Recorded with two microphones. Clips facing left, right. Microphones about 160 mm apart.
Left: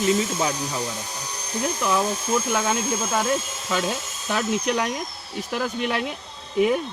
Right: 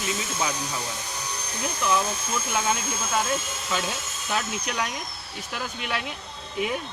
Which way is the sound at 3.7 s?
40° left (ahead or behind).